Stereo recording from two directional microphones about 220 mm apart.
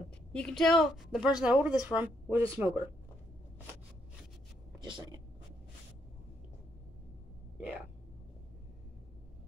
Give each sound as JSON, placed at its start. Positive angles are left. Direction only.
{"t": 0.3, "sound": "a woman's voice", "side_deg": 5}
{"t": 4.8, "sound": "speech", "side_deg": -20}